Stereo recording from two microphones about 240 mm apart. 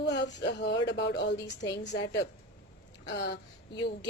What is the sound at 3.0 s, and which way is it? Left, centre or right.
Speech, left.